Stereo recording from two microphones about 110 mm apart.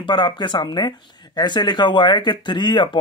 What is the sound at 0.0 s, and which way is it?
Speech, 45° left (ahead or behind).